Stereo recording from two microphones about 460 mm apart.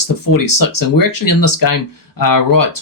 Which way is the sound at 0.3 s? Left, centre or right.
Left.